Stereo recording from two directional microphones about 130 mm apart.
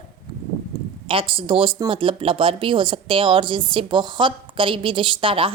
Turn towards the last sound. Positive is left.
turn(degrees=-45)  # may be behind; listen again after turning